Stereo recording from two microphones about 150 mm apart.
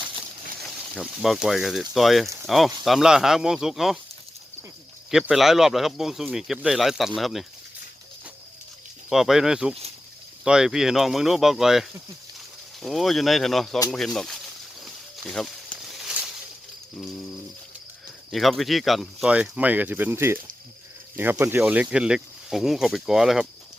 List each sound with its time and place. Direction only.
0.2 s speech: centre (ahead or behind)
5.1 s speech: 5° right (ahead or behind)
9.0 s speech: centre (ahead or behind)
14.8 s snake: centre (ahead or behind)
18.3 s speech: centre (ahead or behind)